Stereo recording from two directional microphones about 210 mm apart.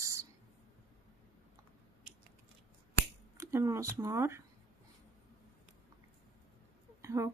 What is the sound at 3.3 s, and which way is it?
Speech, 15° right (ahead or behind).